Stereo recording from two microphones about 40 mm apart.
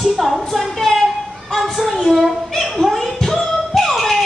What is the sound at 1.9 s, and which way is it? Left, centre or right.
Speech, centre.